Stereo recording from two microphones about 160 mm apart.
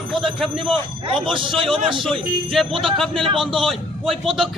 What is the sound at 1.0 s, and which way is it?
Speech, 30° right (ahead or behind).